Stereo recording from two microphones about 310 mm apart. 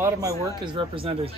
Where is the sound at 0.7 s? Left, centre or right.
Centre.